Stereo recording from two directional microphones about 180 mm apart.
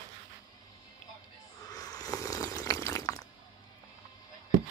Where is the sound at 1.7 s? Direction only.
20° left (ahead or behind).